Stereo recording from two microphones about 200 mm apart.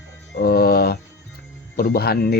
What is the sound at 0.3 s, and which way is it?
Mantra, 50° left (ahead or behind).